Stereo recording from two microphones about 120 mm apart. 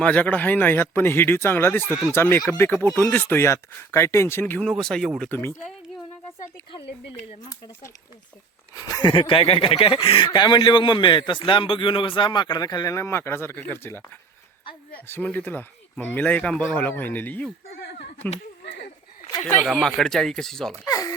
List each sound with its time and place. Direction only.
0.0 s speech: 10° left (ahead or behind)
4.6 s speech: 5° left (ahead or behind)
5.3 s speech: 20° left (ahead or behind)
6.7 s speech: 40° left (ahead or behind)
8.7 s speech: 30° left (ahead or behind)
15.0 s speech: 15° left (ahead or behind)
19.6 s speech: 5° left (ahead or behind)
20.8 s speech: 30° left (ahead or behind)